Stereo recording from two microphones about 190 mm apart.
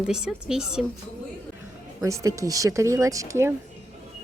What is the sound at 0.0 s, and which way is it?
Speech, 5° right (ahead or behind).